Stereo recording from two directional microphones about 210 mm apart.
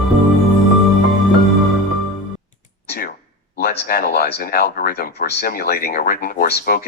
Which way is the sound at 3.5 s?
45° left (ahead or behind).